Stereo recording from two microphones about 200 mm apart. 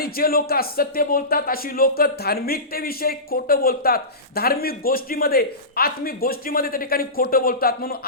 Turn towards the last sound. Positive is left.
turn(degrees=50)  # may be behind; listen again after turning